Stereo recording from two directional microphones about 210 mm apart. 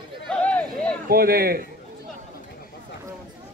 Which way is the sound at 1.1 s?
45° right (ahead or behind).